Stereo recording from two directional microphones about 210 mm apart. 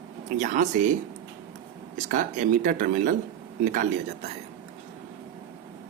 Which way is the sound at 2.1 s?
40° right (ahead or behind).